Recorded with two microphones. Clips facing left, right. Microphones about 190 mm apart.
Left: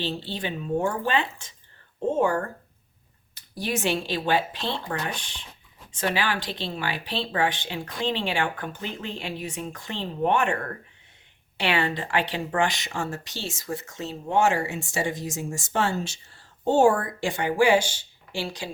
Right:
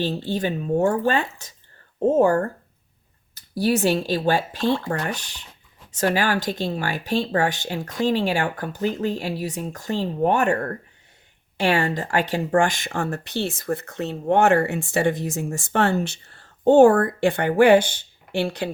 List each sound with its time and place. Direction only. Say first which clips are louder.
0.0 s speech: right 6 dB; 45° right (ahead or behind)
3.6 s speech: right 6 dB; 40° right (ahead or behind); by 18.7 s 60° right (ahead or behind)